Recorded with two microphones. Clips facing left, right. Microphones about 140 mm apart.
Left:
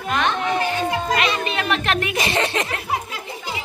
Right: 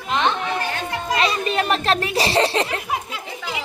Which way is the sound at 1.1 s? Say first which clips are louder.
Right 1 dB; 35° right (ahead or behind).